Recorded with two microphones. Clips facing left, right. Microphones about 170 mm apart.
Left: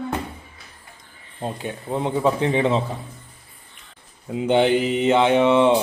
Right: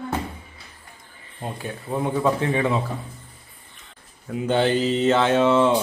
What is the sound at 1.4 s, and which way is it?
Speech, 20° left (ahead or behind).